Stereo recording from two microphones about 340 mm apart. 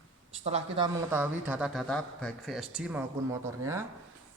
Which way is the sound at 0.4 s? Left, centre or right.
Centre.